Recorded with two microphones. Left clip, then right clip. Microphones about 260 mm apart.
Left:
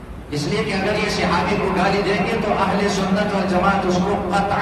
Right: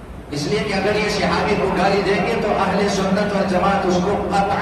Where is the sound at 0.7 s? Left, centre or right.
Left.